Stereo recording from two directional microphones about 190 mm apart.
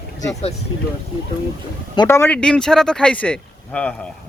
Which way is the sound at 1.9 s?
20° left (ahead or behind).